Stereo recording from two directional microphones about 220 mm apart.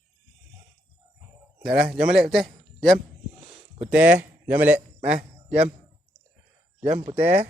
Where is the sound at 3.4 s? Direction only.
30° right (ahead or behind).